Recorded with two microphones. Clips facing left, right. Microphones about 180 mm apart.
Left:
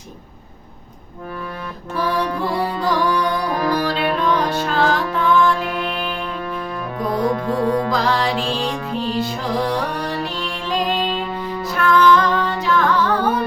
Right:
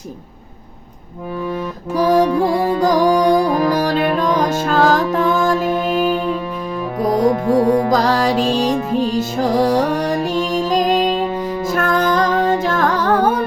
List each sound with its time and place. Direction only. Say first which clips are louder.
2.0 s music: right 8 dB; 45° right (ahead or behind)
7.3 s music: right 6 dB; 20° right (ahead or behind)
7.9 s music: right 4 dB; 40° right (ahead or behind)